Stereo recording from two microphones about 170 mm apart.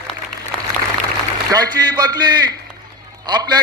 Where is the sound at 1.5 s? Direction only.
25° right (ahead or behind).